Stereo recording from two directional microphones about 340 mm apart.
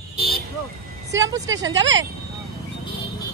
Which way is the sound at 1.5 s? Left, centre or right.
Right.